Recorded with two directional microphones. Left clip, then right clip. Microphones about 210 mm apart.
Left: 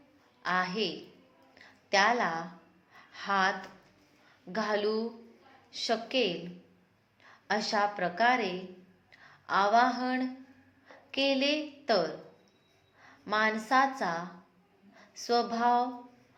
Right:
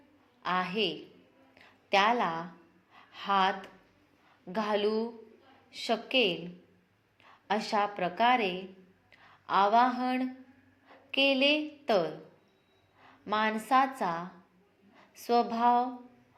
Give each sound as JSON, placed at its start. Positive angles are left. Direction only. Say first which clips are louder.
{"t": 0.4, "sound": "a woman's voice", "louder": "even", "side_deg": -25}
{"t": 1.5, "sound": "a sound", "louder": "even", "side_deg": -25}
{"t": 4.5, "sound": "a woman's voice", "louder": "right 1 dB", "side_deg": -25}